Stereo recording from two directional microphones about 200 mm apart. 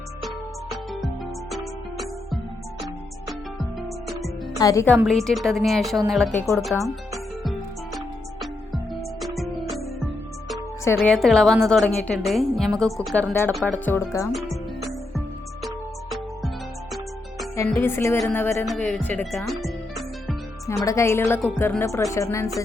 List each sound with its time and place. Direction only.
0.7 s music: centre (ahead or behind)
4.5 s a woman's voice: 15° left (ahead or behind)
5.0 s a woman's voice: centre (ahead or behind)
7.9 s music: centre (ahead or behind)
10.9 s a woman's voice: 5° left (ahead or behind)
15.6 s music: centre (ahead or behind)
17.7 s speech: 10° left (ahead or behind)
20.8 s speech: 15° left (ahead or behind)